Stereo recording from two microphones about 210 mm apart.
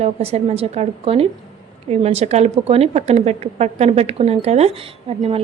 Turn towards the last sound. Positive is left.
turn(degrees=-30)  # may be behind; listen again after turning